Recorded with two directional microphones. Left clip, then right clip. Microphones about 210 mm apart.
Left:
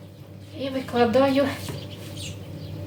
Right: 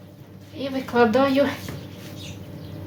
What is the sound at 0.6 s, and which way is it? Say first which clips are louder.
Speech: right 3 dB; 30° right (ahead or behind).